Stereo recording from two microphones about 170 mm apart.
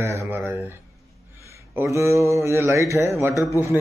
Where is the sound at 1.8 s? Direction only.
15° right (ahead or behind).